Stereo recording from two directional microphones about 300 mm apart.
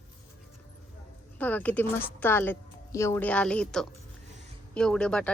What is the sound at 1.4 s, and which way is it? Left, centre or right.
A woman's voice, centre.